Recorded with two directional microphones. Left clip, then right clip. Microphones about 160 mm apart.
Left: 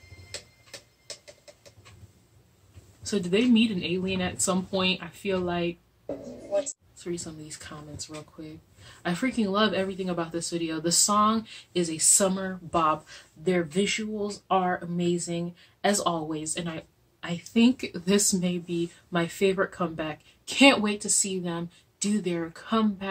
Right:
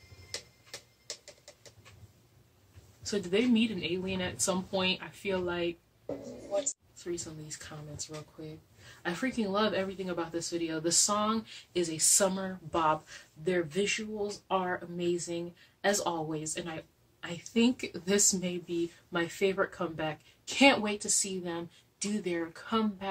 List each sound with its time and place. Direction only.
0.3 s tick-tock: 15° right (ahead or behind)
3.1 s a woman's voice: 5° left (ahead or behind)
7.1 s speech: 5° left (ahead or behind)
9.0 s a woman's voice: 5° left (ahead or behind)